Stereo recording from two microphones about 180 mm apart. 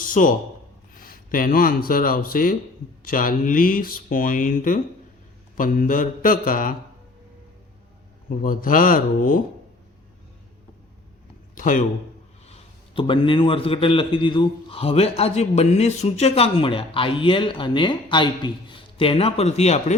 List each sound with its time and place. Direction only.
0.0 s a man's voice: 50° left (ahead or behind)
8.4 s speech: 50° left (ahead or behind)
11.5 s a man's voice: 45° left (ahead or behind)
12.5 s a man's voice: 30° left (ahead or behind)